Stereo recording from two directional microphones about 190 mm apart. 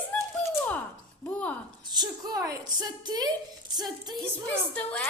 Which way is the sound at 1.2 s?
10° left (ahead or behind).